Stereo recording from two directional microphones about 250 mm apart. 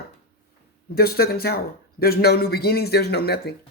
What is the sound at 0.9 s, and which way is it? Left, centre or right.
Speech, left.